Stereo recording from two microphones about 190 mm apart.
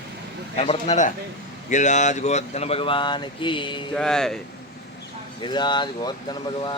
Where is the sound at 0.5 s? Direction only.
35° left (ahead or behind).